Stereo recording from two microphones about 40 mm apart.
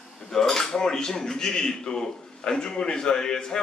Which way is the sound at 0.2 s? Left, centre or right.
Centre.